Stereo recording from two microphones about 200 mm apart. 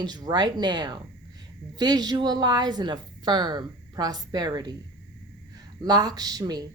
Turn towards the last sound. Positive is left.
turn(degrees=-20)  # may be behind; listen again after turning